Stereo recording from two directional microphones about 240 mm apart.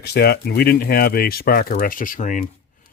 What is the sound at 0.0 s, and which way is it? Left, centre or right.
Speech, left.